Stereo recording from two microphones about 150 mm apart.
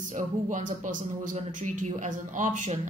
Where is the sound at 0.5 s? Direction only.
55° right (ahead or behind).